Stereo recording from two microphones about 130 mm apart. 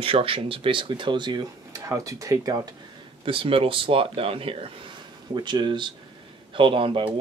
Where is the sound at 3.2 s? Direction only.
45° right (ahead or behind).